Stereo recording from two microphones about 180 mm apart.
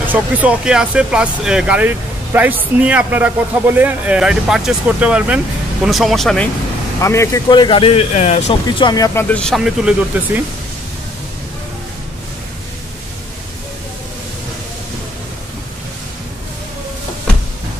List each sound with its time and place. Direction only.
0.0 s speech: 10° right (ahead or behind)
7.0 s speech: 15° left (ahead or behind); by 8.5 s 35° left (ahead or behind)
8.6 s speech: 25° left (ahead or behind)
9.3 s speech: 5° left (ahead or behind)